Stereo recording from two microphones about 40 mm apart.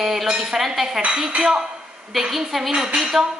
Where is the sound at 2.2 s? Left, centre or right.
Centre.